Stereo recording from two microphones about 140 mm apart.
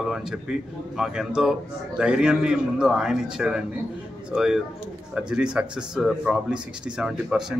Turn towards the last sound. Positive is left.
turn(degrees=-5)  # may be behind; listen again after turning